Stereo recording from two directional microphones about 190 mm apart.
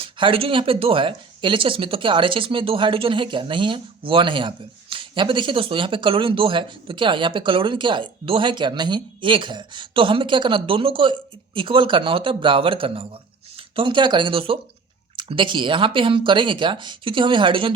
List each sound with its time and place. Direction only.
0.0 s speech: 30° right (ahead or behind)